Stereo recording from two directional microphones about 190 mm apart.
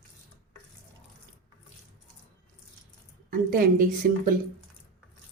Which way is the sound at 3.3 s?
50° right (ahead or behind).